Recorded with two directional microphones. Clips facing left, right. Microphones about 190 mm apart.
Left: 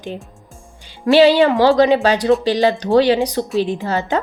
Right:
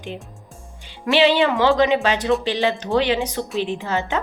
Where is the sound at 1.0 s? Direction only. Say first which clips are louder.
Left 6 dB; 40° left (ahead or behind).